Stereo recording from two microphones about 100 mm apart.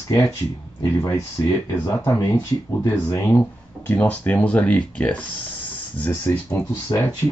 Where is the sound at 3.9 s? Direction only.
15° left (ahead or behind).